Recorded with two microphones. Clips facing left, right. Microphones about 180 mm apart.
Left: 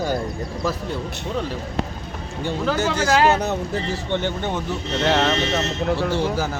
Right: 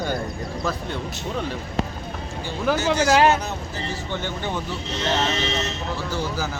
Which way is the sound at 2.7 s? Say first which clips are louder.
Right 1 dB; 55° left (ahead or behind).